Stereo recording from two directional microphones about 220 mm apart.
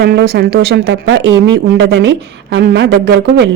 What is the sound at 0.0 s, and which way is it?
Speech, 50° right (ahead or behind).